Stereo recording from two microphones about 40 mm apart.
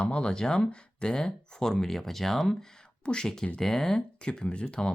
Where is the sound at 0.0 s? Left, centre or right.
Left.